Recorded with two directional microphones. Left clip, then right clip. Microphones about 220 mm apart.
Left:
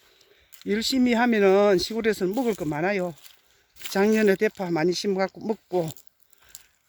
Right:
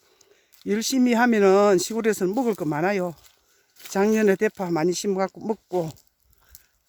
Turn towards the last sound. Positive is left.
turn(degrees=0)  # may be behind; listen again after turning